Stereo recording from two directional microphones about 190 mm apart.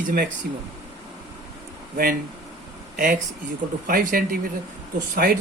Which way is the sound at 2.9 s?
50° right (ahead or behind).